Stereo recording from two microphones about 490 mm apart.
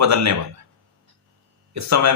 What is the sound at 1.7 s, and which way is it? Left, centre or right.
Speech, right.